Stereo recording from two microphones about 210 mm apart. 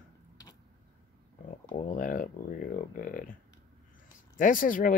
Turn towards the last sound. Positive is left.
turn(degrees=40)  # may be behind; listen again after turning